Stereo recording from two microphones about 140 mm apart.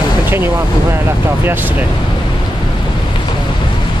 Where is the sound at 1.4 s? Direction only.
15° right (ahead or behind).